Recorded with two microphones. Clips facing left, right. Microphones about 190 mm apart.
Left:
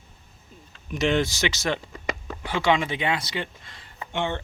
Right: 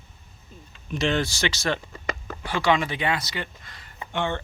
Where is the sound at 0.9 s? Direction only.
20° left (ahead or behind).